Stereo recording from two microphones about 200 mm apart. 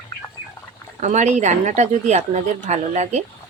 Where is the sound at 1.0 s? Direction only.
35° right (ahead or behind).